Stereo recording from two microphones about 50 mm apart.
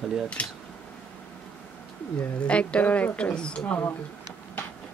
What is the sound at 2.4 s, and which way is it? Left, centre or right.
Speech, left.